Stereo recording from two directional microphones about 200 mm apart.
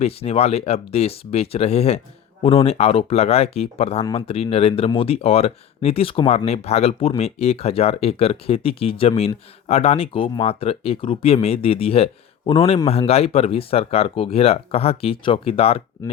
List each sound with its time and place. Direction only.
0.0 s speech: 30° left (ahead or behind)